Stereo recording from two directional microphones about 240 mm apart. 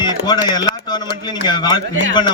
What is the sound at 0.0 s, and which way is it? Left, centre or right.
Speech, centre.